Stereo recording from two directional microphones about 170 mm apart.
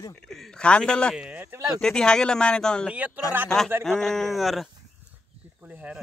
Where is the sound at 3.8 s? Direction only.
Centre (ahead or behind).